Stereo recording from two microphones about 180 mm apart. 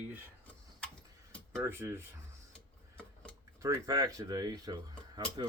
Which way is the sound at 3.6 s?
20° right (ahead or behind).